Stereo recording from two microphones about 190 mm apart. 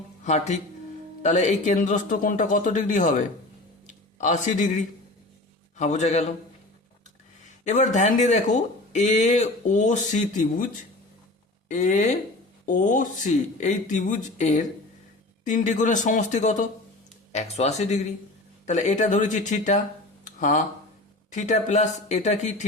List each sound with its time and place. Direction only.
0.3 s speech: 35° left (ahead or behind)
7.6 s speech: 40° left (ahead or behind)
11.7 s speech: 40° left (ahead or behind)
20.2 s a sound: 40° left (ahead or behind)
21.3 s speech: 40° left (ahead or behind)